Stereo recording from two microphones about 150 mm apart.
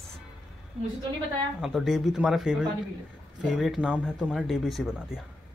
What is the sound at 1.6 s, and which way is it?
Speech, centre (ahead or behind).